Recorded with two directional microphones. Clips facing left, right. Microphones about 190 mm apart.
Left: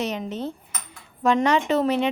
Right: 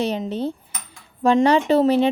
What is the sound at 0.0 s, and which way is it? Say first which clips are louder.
Cutlery: right 4 dB; 30° right (ahead or behind).